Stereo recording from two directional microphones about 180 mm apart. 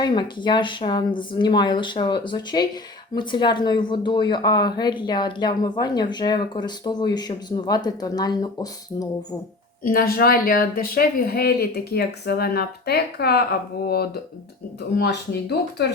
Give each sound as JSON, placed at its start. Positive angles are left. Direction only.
{"t": 0.0, "sound": "speech", "side_deg": 25}
{"t": 9.8, "sound": "speech", "side_deg": 55}